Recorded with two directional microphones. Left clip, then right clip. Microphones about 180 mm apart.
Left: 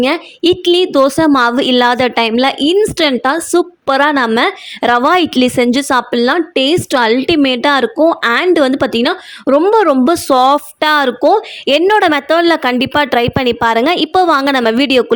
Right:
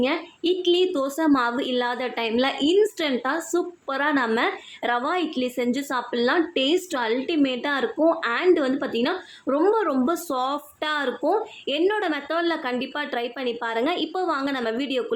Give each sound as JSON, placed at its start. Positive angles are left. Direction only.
{"t": 0.0, "sound": "a woman's voice", "side_deg": 60}
{"t": 8.2, "sound": "a woman's voice", "side_deg": 60}